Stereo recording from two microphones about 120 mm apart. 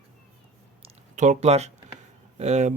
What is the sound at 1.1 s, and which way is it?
Speech, 75° right (ahead or behind).